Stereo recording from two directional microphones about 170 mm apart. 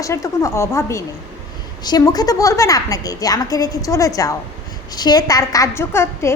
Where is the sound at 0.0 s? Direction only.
20° left (ahead or behind).